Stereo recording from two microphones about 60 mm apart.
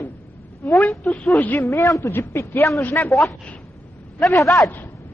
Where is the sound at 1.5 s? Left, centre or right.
Left.